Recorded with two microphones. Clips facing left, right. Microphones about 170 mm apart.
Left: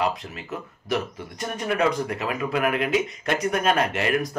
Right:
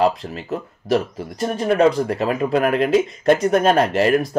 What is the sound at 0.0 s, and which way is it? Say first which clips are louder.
Speech: right 7 dB; 35° right (ahead or behind).